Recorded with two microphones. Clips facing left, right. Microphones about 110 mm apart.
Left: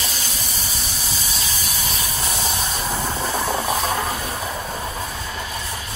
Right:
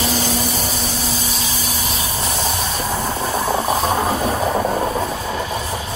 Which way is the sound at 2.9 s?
10° right (ahead or behind).